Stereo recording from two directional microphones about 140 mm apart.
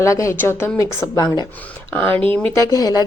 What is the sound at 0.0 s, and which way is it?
A woman's voice, 20° left (ahead or behind).